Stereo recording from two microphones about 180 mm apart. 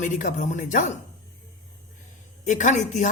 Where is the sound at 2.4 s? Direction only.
45° left (ahead or behind).